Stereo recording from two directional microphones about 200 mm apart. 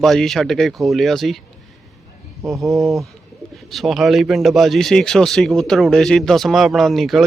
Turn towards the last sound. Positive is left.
turn(degrees=0)  # may be behind; listen again after turning